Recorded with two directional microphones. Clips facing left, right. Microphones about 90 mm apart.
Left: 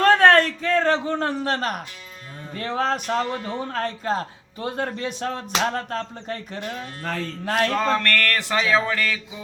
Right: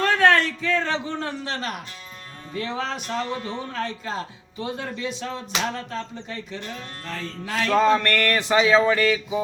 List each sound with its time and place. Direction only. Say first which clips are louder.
0.0 s a man's voice: left 4 dB; 40° left (ahead or behind)
7.0 s music: left 6 dB; 55° left (ahead or behind)
7.8 s a sound: right 3 dB; 15° right (ahead or behind)